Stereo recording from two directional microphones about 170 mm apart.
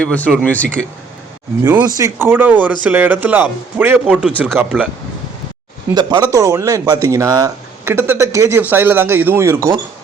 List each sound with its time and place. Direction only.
0.0 s speech: 10° left (ahead or behind)
2.0 s speech: 15° right (ahead or behind)
5.9 s speech: 25° right (ahead or behind)